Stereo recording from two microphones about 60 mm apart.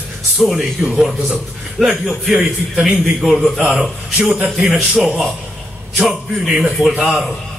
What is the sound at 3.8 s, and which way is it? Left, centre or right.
A man's voice, centre.